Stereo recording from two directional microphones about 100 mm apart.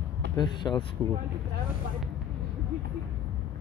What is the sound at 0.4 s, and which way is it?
Speech, 50° left (ahead or behind).